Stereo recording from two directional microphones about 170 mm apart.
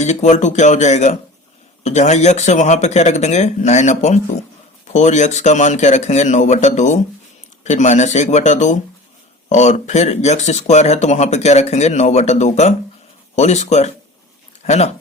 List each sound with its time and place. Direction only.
0.0 s speech: 45° left (ahead or behind)